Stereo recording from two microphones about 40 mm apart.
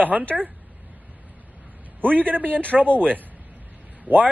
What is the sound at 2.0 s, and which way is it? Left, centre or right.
Speech, right.